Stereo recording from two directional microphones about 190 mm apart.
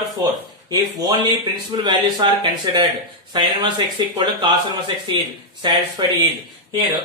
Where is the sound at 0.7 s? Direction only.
20° right (ahead or behind).